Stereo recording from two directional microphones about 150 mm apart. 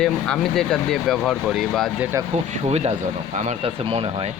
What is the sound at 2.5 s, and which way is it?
Speech, 45° right (ahead or behind).